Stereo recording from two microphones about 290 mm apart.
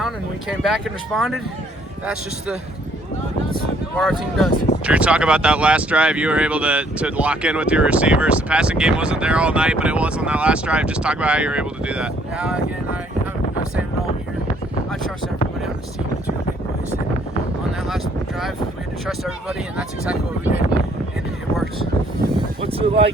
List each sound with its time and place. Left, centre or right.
0.0 s speech: centre
3.9 s speech: centre
17.8 s speech: centre
22.6 s speech: centre